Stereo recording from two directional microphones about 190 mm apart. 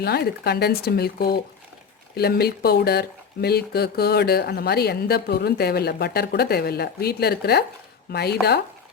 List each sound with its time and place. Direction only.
0.0 s speech: 60° left (ahead or behind)